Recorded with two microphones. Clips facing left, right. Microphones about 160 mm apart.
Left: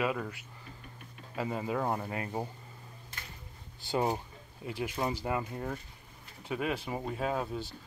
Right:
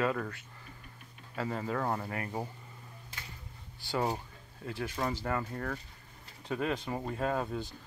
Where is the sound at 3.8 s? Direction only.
20° left (ahead or behind).